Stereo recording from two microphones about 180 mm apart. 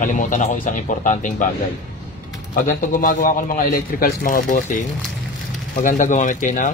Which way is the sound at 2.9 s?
45° left (ahead or behind).